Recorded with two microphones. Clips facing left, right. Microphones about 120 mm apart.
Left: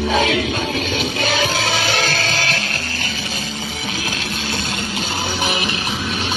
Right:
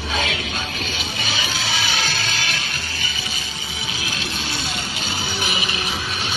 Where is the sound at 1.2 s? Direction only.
55° left (ahead or behind).